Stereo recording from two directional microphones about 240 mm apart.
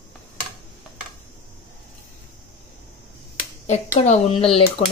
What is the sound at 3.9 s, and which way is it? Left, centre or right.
Speech, left.